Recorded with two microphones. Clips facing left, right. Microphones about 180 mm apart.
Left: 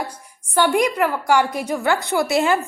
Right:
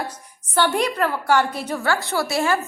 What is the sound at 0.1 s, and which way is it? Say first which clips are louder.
A woman's voice: left 2 dB; 10° left (ahead or behind).